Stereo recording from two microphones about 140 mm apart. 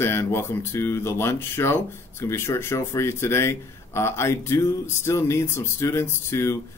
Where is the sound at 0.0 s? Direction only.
20° left (ahead or behind).